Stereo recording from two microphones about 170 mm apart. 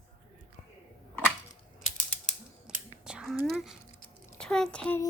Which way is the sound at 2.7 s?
5° right (ahead or behind).